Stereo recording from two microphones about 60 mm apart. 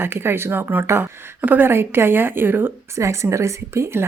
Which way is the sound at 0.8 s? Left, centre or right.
Right.